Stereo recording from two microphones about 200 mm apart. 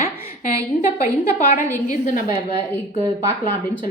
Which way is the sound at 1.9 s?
40° left (ahead or behind).